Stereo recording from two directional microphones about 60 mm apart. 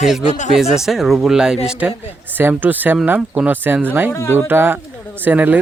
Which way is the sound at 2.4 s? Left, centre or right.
Right.